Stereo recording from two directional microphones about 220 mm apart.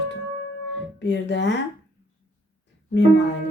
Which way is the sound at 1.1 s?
55° left (ahead or behind).